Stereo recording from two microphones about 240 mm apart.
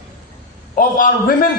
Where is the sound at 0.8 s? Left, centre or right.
Left.